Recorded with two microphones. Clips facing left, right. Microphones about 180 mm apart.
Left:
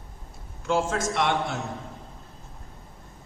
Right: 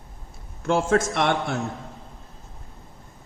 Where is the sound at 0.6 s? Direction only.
55° right (ahead or behind).